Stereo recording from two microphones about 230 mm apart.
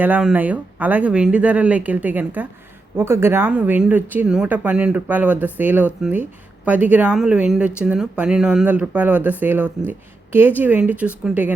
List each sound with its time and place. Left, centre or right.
0.0 s speech: centre